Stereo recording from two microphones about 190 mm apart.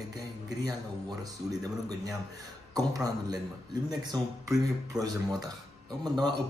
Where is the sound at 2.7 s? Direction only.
20° right (ahead or behind).